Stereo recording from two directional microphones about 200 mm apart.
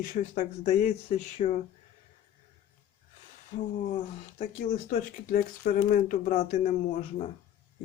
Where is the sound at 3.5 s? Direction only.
35° left (ahead or behind).